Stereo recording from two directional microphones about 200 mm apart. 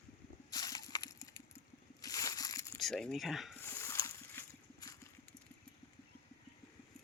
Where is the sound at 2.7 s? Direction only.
Centre (ahead or behind).